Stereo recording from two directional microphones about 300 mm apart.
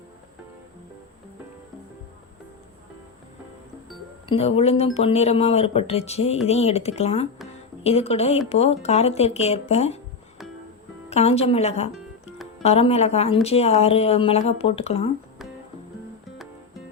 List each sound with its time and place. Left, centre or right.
4.3 s speech: centre
11.1 s speech: left